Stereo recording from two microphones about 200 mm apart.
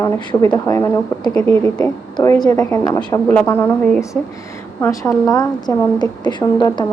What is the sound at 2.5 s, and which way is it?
A woman's voice, 10° left (ahead or behind).